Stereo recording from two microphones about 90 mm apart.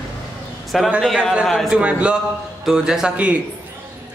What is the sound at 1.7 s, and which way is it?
A woman's voice, 10° right (ahead or behind).